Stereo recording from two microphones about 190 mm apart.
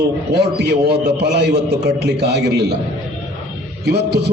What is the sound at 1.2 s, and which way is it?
A man's voice, 60° right (ahead or behind).